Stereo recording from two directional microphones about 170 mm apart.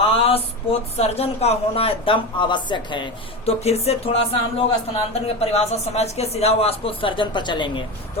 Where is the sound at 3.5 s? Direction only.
40° left (ahead or behind).